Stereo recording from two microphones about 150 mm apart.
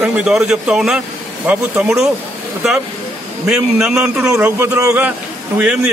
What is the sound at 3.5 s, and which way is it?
Speech, centre (ahead or behind).